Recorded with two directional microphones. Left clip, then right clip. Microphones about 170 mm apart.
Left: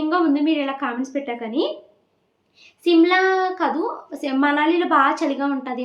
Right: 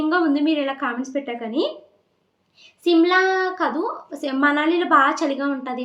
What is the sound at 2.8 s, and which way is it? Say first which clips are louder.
A woman's voice: left 1 dB; 5° left (ahead or behind).